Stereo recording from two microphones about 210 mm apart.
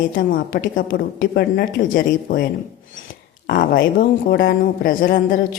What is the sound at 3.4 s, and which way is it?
A woman's voice, 40° left (ahead or behind).